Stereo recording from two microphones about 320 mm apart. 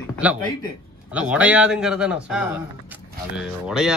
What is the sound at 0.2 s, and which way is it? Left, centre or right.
Speech, centre.